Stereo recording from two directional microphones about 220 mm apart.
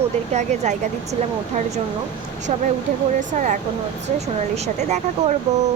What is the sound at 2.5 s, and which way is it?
Speech, 30° right (ahead or behind).